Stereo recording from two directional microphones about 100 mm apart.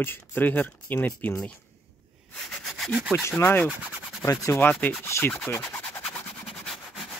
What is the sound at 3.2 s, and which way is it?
Speech, 25° left (ahead or behind).